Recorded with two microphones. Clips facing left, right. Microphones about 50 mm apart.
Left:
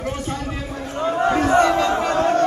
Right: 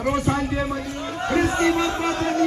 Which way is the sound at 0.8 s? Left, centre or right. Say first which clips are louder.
Left 7 dB; left.